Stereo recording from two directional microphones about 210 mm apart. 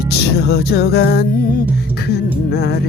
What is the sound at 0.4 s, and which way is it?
Music, 50° left (ahead or behind).